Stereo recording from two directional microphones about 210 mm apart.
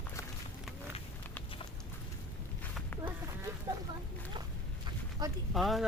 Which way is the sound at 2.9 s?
10° left (ahead or behind).